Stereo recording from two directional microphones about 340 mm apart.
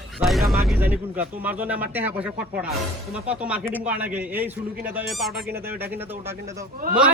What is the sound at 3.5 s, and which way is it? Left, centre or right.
A man's voice, centre.